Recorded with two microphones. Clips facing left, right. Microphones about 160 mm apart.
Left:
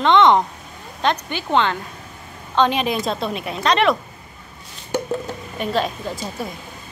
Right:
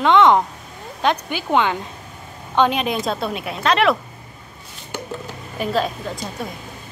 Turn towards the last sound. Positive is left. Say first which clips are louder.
# left 1 dB
turn(degrees=0)  # may be behind; listen again after turning